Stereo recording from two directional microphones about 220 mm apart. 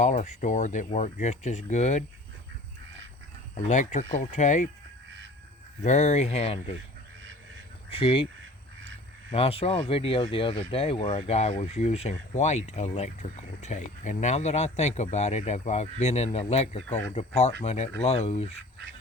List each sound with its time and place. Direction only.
0.0 s speech: 30° left (ahead or behind)
3.5 s speech: 35° left (ahead or behind)
5.8 s speech: 30° left (ahead or behind)
7.9 s speech: 25° left (ahead or behind)
9.3 s speech: 25° left (ahead or behind)